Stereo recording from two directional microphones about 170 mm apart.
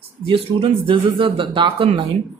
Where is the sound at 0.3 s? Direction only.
30° right (ahead or behind).